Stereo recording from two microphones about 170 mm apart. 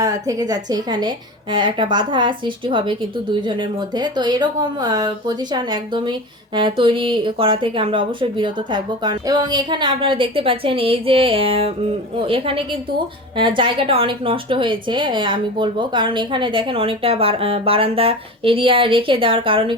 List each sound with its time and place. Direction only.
0.0 s a woman's voice: 20° right (ahead or behind)